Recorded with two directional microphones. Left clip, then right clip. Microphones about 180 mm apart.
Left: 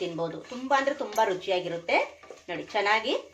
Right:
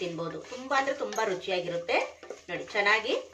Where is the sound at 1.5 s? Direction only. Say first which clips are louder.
Left 2 dB; 25° left (ahead or behind).